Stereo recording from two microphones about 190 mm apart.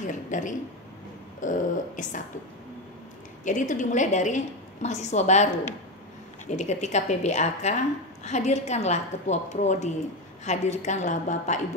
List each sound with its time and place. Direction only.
0.0 s a woman's voice: 40° left (ahead or behind)
3.4 s a woman's voice: 40° left (ahead or behind)